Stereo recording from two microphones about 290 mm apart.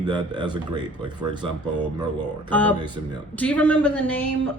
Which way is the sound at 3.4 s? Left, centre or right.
Centre.